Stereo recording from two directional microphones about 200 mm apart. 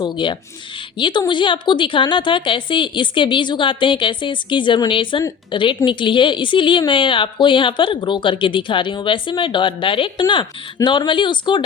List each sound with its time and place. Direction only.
0.0 s a woman's voice: 25° left (ahead or behind)